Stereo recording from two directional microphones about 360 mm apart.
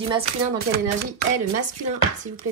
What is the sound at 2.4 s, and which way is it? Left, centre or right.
Speech, right.